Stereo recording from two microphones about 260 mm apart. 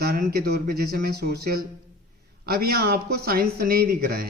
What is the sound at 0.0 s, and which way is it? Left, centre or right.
Speech, right.